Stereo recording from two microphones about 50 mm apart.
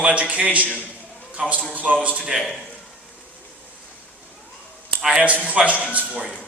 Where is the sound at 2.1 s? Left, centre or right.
Centre.